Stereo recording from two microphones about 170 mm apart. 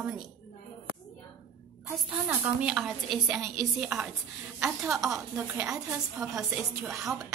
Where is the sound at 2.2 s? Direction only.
10° right (ahead or behind).